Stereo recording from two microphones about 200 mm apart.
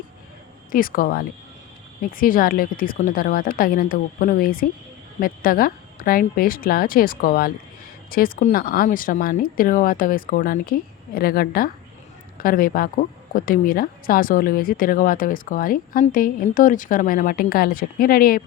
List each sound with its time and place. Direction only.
0.7 s speech: 45° left (ahead or behind)